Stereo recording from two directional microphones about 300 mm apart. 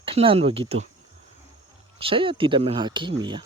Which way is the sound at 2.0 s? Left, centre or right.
Centre.